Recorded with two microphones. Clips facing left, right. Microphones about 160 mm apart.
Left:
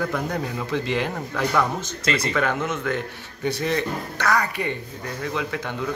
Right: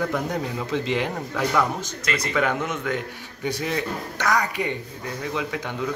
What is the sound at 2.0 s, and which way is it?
Speech, 30° left (ahead or behind).